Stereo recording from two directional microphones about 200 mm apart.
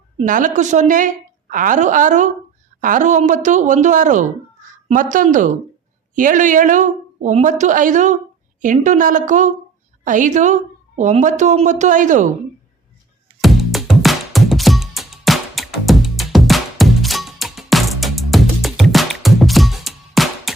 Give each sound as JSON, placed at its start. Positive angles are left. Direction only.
{"t": 0.2, "sound": "a woman's voice", "side_deg": -40}
{"t": 13.4, "sound": "music", "side_deg": 0}